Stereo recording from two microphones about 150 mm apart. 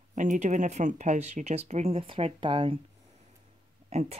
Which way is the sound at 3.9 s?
45° right (ahead or behind).